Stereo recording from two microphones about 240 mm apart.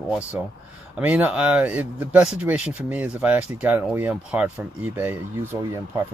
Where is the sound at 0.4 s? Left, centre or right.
Centre.